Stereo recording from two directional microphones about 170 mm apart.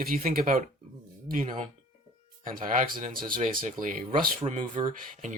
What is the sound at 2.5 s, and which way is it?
Speech, 50° right (ahead or behind).